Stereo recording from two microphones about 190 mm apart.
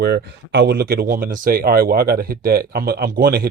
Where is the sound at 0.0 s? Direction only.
60° right (ahead or behind).